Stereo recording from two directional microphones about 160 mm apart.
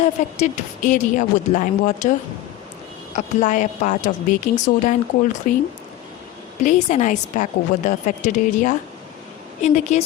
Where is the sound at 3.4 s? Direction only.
50° left (ahead or behind).